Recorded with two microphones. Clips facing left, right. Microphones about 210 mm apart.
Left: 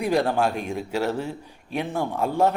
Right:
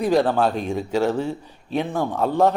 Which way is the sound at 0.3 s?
10° left (ahead or behind).